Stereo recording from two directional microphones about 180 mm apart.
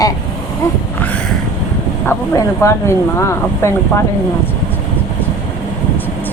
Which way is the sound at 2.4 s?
15° left (ahead or behind).